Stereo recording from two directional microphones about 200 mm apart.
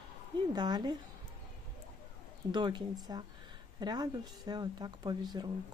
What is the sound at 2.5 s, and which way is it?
Speech, 20° right (ahead or behind).